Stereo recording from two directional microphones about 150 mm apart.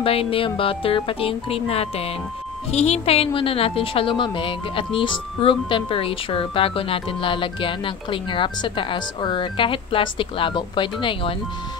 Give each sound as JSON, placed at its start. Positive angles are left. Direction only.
{"t": 0.0, "sound": "a woman's voice", "side_deg": 40}